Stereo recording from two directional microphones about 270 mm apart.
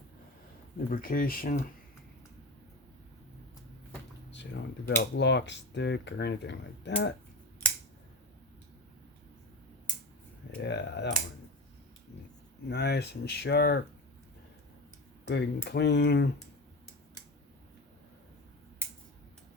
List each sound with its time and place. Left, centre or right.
0.9 s speech: left
4.9 s speech: left
10.6 s speech: left
12.6 s speech: left
15.2 s speech: left